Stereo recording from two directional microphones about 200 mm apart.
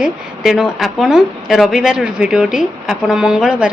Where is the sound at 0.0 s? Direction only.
Centre (ahead or behind).